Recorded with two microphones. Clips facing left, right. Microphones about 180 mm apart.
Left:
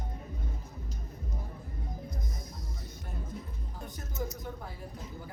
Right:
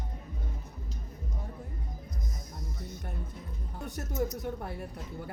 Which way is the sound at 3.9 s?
70° right (ahead or behind).